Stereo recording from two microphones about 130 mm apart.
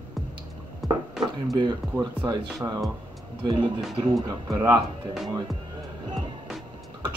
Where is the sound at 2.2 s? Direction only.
35° right (ahead or behind).